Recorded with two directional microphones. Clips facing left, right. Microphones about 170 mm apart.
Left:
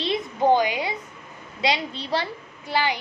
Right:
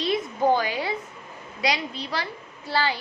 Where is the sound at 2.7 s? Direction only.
15° left (ahead or behind).